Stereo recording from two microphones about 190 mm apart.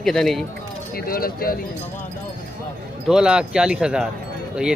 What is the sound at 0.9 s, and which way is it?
Speech, 50° left (ahead or behind).